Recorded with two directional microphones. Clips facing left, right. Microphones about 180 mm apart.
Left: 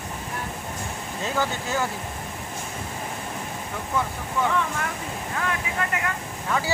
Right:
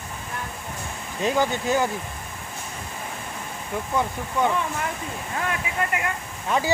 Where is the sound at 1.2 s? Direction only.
15° right (ahead or behind).